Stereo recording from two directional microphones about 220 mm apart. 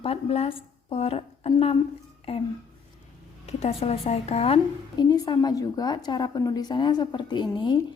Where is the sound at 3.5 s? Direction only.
30° left (ahead or behind).